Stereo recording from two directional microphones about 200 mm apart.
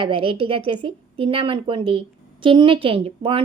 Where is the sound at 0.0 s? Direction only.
25° right (ahead or behind).